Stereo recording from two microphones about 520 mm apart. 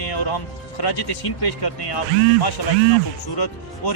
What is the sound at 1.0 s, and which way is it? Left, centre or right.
Speech, left.